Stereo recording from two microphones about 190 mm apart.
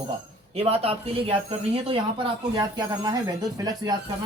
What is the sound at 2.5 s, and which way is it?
Speech, 15° right (ahead or behind).